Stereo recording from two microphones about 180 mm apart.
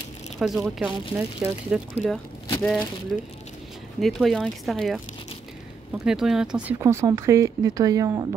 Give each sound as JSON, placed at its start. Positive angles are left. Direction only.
{"t": 0.4, "sound": "speech", "side_deg": 0}
{"t": 6.0, "sound": "speech", "side_deg": -5}
{"t": 6.8, "sound": "speech", "side_deg": -15}